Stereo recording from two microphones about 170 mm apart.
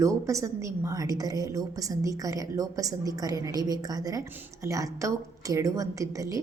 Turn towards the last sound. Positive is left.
turn(degrees=-20)  # may be behind; listen again after turning